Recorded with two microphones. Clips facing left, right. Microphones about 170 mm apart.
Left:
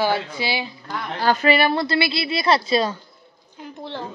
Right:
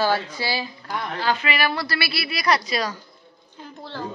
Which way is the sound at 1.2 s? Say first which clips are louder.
Left 7 dB; 40° left (ahead or behind).